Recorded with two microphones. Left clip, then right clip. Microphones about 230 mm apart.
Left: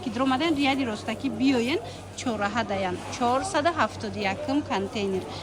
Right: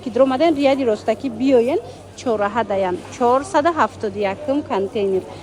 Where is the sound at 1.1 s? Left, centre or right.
Centre.